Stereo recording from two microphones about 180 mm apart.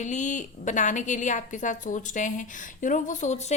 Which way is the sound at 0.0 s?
40° left (ahead or behind).